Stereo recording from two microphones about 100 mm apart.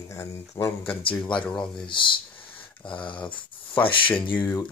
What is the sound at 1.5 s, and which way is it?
Speech, 5° left (ahead or behind).